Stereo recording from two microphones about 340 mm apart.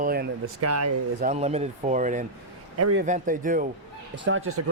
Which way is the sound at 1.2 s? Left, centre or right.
Centre.